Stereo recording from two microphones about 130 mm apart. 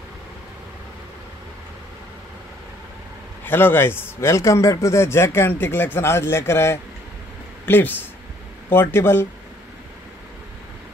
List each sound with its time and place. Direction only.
3.4 s speech: 15° left (ahead or behind)